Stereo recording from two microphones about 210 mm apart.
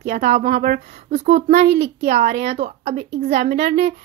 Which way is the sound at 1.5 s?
55° right (ahead or behind).